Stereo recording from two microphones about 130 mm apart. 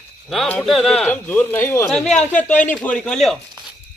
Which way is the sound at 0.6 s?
Centre (ahead or behind).